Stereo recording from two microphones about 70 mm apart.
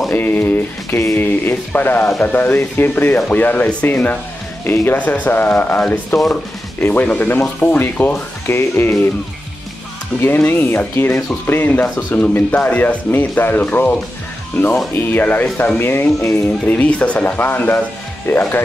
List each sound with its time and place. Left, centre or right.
0.1 s speech: left
10.2 s speech: left
15.1 s speech: left
16.3 s speech: left
16.6 s speech: left